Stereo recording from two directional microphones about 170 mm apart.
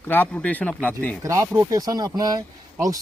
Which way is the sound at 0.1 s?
10° left (ahead or behind).